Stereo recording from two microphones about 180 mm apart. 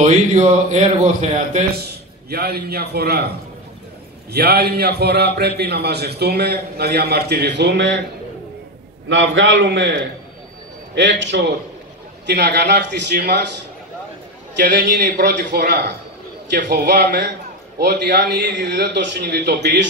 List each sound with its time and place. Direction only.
0.0 s a man's voice: 40° right (ahead or behind)
2.2 s a man's voice: 60° right (ahead or behind); by 8.0 s 80° right
9.1 s a man's voice: 90° right
11.0 s a man's voice: 90° right
12.3 s a man's voice: 65° right (ahead or behind)
14.6 s a man's voice: 70° right (ahead or behind)